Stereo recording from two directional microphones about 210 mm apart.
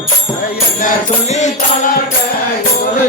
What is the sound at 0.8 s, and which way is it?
Music, 35° left (ahead or behind).